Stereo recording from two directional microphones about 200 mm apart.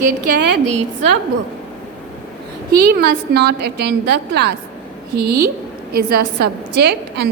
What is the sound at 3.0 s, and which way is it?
A woman's voice, 55° right (ahead or behind).